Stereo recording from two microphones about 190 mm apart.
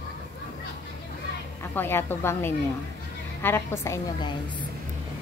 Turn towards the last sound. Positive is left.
turn(degrees=20)  # may be behind; listen again after turning